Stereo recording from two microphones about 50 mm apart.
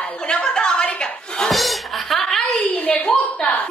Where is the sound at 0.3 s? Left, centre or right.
Centre.